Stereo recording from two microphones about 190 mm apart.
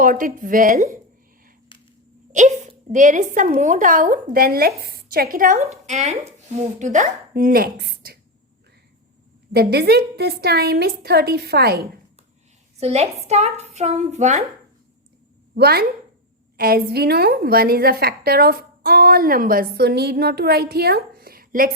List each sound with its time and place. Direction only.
0.0 s a woman's voice: 45° right (ahead or behind)
2.3 s a woman's voice: 40° right (ahead or behind); by 8.2 s 55° right (ahead or behind)
9.5 s a woman's voice: 55° right (ahead or behind)
12.8 s a woman's voice: 35° right (ahead or behind)
15.5 s a woman's voice: 55° right (ahead or behind)